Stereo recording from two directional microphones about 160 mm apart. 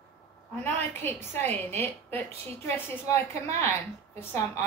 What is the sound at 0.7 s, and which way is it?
A woman's voice, 10° left (ahead or behind).